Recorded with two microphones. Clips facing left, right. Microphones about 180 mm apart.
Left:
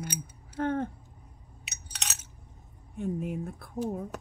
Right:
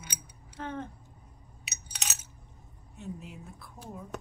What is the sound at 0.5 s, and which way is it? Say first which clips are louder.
Speech: left 8 dB; 55° left (ahead or behind).